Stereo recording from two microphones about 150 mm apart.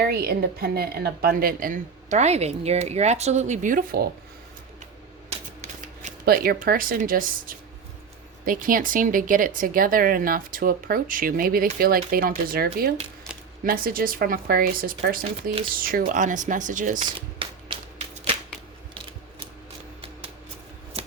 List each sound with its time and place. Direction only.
0.0 s a woman's voice: 90° right
6.2 s speech: 90° right; by 12.3 s 75° right (ahead or behind)
12.5 s speech: 90° right
13.3 s a sound: 5° right (ahead or behind)
13.7 s a woman's voice: 70° right (ahead or behind)
17.1 s shuffling cards: 35° right (ahead or behind)
20.9 s a sound: 40° right (ahead or behind)